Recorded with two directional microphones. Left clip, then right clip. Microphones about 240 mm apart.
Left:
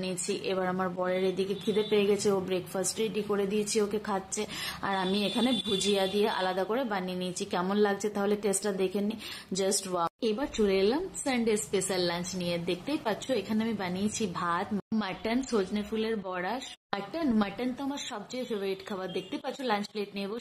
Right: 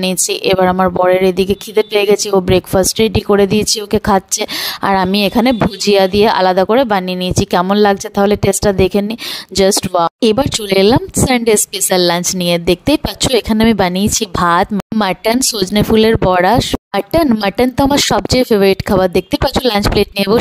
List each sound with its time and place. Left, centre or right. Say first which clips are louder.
0.0 s speech: right 18 dB; right